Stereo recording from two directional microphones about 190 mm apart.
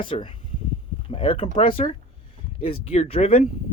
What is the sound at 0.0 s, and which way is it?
Speech, 25° left (ahead or behind).